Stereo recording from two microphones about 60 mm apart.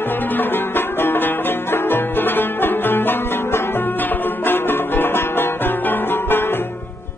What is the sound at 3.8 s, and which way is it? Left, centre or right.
Music, left.